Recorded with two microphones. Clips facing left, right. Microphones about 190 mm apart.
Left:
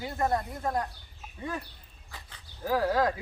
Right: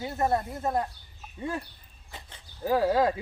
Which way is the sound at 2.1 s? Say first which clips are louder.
Right 2 dB; 25° right (ahead or behind).